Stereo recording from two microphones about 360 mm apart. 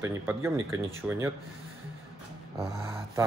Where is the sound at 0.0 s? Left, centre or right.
Centre.